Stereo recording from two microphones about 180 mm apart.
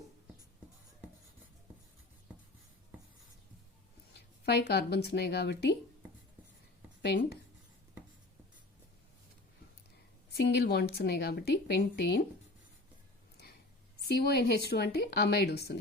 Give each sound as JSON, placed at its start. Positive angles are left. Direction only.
{"t": 4.1, "sound": "speech", "side_deg": 65}
{"t": 10.3, "sound": "a woman's voice", "side_deg": 70}
{"t": 14.1, "sound": "a woman's voice", "side_deg": 60}